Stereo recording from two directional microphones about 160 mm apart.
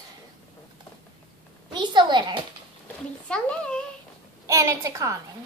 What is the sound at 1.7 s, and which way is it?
Speech, 30° right (ahead or behind).